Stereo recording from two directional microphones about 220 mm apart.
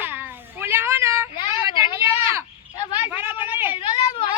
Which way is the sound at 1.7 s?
20° left (ahead or behind).